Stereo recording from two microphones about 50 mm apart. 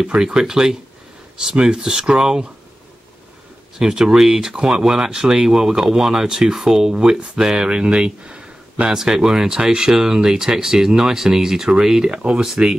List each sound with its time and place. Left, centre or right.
0.2 s speech: centre
3.8 s speech: centre
12.2 s speech: right